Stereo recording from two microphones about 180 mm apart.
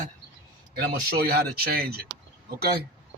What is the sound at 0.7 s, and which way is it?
Speech, 60° right (ahead or behind).